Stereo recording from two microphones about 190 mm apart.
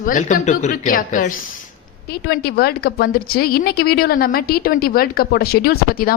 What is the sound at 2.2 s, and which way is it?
A woman's voice, 55° left (ahead or behind).